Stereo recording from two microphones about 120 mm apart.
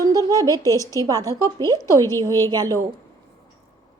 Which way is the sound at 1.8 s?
25° left (ahead or behind).